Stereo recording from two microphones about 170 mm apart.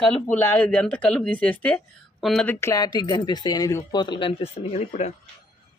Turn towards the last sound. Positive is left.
turn(degrees=40)  # may be behind; listen again after turning